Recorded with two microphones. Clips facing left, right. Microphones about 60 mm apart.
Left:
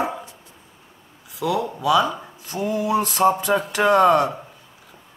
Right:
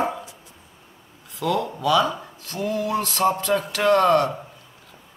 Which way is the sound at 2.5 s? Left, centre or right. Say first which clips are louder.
Left 2 dB; centre.